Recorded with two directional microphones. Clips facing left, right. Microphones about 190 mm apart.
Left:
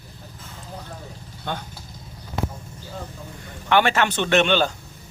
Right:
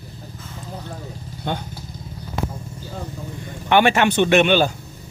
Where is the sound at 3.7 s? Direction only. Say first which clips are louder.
Right 3 dB; 15° right (ahead or behind).